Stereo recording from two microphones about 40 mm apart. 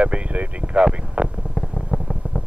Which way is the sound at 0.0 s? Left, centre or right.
Right.